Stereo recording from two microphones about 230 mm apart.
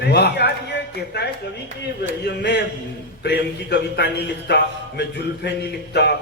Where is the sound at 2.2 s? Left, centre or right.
Left.